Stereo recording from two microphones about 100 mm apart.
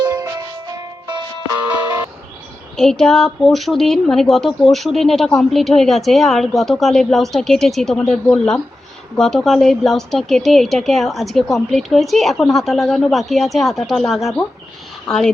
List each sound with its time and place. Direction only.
0.0 s music: 40° right (ahead or behind)
1.7 s music: 15° right (ahead or behind)
2.7 s a woman's voice: 5° left (ahead or behind)